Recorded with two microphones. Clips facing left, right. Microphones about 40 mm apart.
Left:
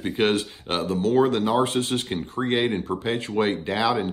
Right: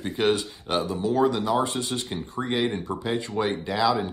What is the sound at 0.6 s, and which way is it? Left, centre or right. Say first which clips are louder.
Speech: left 1 dB; left.